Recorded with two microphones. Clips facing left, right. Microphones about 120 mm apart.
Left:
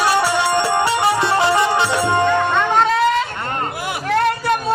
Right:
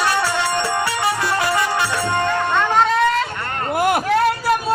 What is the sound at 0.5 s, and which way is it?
Music, 25° left (ahead or behind).